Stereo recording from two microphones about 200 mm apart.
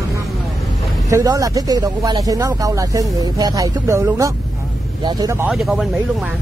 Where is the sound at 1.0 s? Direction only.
15° right (ahead or behind).